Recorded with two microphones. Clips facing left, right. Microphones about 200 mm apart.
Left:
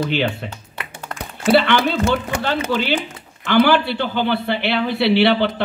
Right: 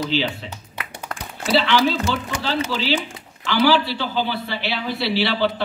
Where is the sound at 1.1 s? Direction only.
55° left (ahead or behind).